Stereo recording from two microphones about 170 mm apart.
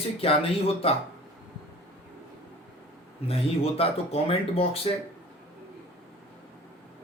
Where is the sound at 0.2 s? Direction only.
35° left (ahead or behind).